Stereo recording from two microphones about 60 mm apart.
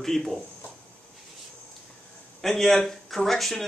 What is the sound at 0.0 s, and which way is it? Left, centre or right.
Speech, centre.